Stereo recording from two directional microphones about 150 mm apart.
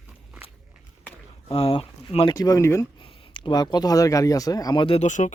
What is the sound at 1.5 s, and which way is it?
Speech, 40° left (ahead or behind).